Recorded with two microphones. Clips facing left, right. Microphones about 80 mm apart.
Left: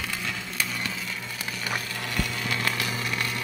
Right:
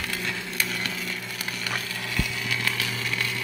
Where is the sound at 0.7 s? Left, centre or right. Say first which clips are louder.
Right 1 dB; centre.